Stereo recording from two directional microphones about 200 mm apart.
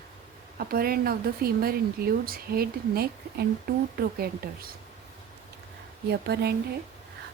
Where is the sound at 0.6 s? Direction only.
50° right (ahead or behind).